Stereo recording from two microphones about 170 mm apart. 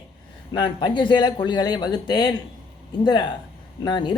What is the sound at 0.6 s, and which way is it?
Speech, 25° left (ahead or behind).